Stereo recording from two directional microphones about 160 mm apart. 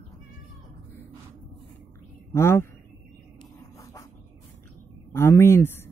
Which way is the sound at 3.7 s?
20° left (ahead or behind).